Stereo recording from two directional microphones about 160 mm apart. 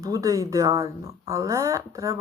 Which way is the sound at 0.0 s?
20° right (ahead or behind).